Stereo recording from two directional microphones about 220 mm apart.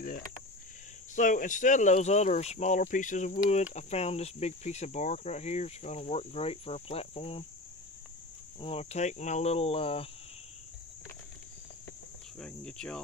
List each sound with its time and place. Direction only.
1.1 s speech: 35° left (ahead or behind)
8.5 s speech: 25° left (ahead or behind)
12.4 s cricket: 5° left (ahead or behind)